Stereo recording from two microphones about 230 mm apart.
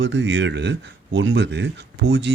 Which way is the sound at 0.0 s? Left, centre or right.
Right.